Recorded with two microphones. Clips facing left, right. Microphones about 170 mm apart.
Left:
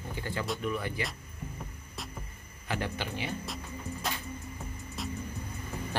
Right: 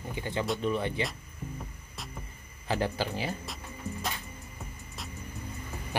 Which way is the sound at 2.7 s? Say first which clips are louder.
Right 4 dB; 35° right (ahead or behind).